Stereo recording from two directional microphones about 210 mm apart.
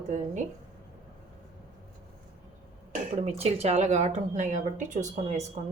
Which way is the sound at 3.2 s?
30° right (ahead or behind).